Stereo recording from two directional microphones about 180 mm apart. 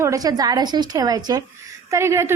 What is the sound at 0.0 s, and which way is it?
A woman's voice, 20° right (ahead or behind).